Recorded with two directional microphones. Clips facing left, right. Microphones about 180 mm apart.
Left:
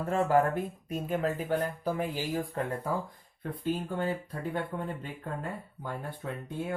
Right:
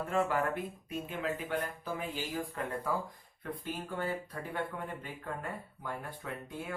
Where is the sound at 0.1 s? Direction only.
40° left (ahead or behind).